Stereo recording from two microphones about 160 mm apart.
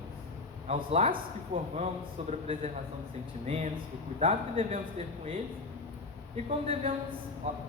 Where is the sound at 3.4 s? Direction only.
40° right (ahead or behind).